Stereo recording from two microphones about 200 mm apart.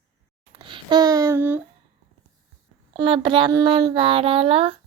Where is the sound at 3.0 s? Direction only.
25° right (ahead or behind).